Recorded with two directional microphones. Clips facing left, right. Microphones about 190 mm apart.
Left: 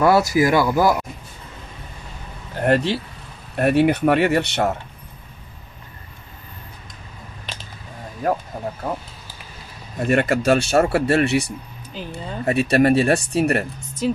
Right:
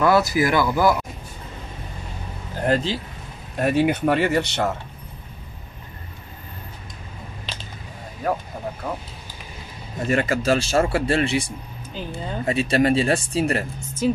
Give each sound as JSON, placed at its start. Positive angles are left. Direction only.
{"t": 0.0, "sound": "speech", "side_deg": 20}
{"t": 2.6, "sound": "speech", "side_deg": 65}
{"t": 10.0, "sound": "speech", "side_deg": 60}
{"t": 11.9, "sound": "speech", "side_deg": 0}
{"t": 12.4, "sound": "speech", "side_deg": 60}
{"t": 14.0, "sound": "speech", "side_deg": 0}